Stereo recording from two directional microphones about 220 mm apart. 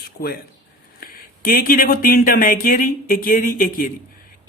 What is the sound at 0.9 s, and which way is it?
Speech, 40° left (ahead or behind).